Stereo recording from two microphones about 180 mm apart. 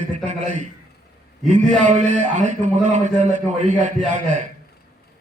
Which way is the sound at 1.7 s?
40° right (ahead or behind).